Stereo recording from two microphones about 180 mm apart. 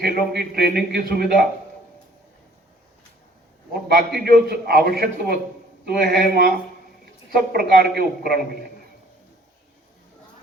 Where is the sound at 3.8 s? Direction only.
65° right (ahead or behind).